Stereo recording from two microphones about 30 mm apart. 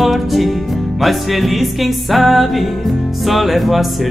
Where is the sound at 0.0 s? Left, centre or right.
Centre.